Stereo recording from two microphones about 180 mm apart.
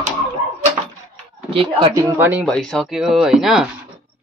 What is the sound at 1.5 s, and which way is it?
Speech, 30° right (ahead or behind).